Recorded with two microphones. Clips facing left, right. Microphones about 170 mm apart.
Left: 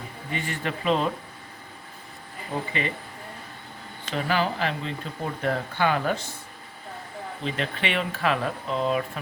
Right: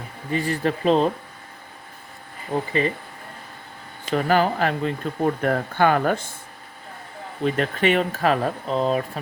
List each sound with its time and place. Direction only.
0.3 s speech: 35° right (ahead or behind)
4.1 s speech: 45° right (ahead or behind)
7.4 s speech: 45° right (ahead or behind)